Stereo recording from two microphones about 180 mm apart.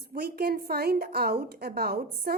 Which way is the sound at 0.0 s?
60° right (ahead or behind).